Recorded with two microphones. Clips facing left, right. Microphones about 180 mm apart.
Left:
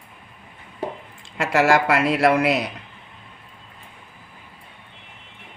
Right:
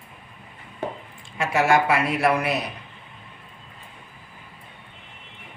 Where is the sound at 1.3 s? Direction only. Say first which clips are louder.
Left 2 dB; 90° left.